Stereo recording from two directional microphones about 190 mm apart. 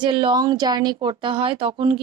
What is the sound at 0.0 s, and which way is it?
Speech, 25° right (ahead or behind).